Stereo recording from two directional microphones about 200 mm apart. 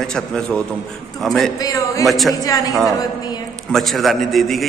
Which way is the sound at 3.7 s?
Centre (ahead or behind).